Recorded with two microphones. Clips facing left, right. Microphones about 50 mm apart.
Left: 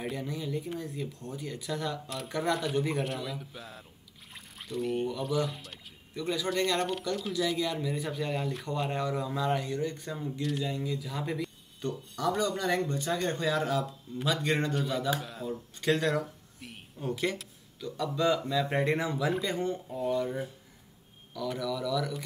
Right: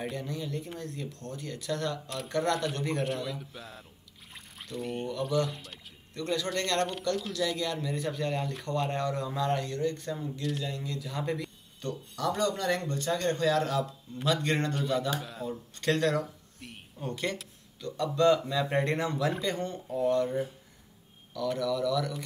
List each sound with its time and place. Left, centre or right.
0.0 s speech: centre
10.4 s speech: centre
11.8 s speech: centre